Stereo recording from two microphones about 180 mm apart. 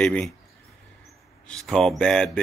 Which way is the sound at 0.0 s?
5° left (ahead or behind).